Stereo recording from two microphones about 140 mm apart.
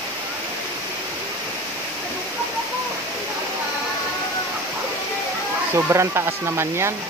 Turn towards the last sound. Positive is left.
turn(degrees=-20)  # may be behind; listen again after turning